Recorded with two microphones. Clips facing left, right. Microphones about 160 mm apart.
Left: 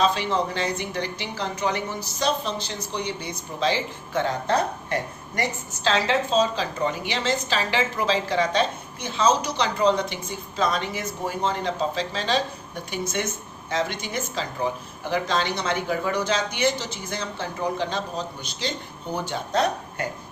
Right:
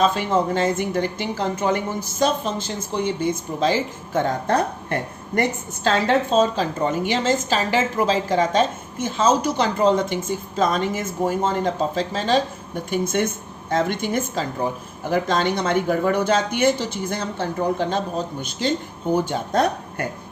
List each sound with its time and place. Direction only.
0.0 s speech: 45° right (ahead or behind)